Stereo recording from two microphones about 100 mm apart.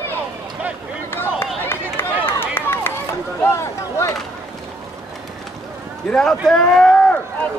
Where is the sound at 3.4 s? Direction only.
25° left (ahead or behind).